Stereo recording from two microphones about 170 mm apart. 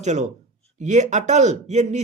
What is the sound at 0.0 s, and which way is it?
Speech, 45° right (ahead or behind).